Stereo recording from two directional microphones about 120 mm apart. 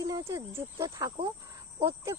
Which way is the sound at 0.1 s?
25° right (ahead or behind).